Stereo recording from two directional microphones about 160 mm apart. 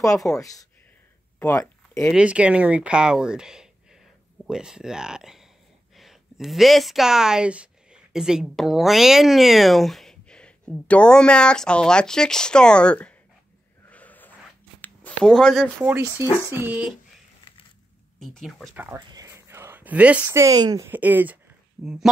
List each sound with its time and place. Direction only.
0.3 s speech: 20° left (ahead or behind)
1.4 s a sound: 15° left (ahead or behind)
2.1 s speech: 5° right (ahead or behind)
13.8 s a sound: 10° left (ahead or behind)
15.8 s speech: 15° right (ahead or behind)
18.2 s speech: centre (ahead or behind)
18.9 s speech: 25° right (ahead or behind)
20.9 s speech: 10° right (ahead or behind)